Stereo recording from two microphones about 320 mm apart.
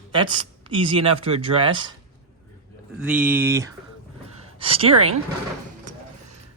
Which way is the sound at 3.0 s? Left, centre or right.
Centre.